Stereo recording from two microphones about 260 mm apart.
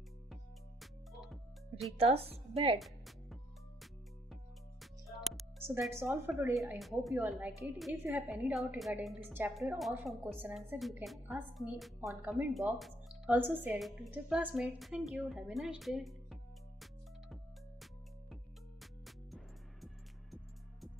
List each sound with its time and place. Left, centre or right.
0.3 s music: centre
2.0 s speech: right
2.8 s music: centre
5.0 s music: centre
5.9 s a woman's voice: centre
18.3 s music: centre